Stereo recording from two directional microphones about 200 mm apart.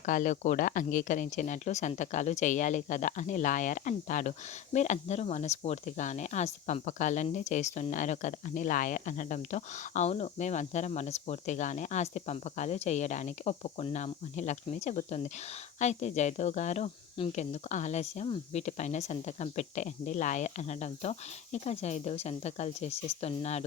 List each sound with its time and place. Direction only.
0.0 s speech: 40° left (ahead or behind)